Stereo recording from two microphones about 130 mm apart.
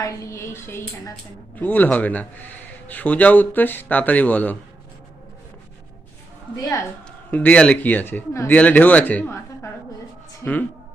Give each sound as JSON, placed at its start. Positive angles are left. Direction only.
{"t": 0.0, "sound": "speech", "side_deg": 25}
{"t": 7.3, "sound": "speech", "side_deg": 10}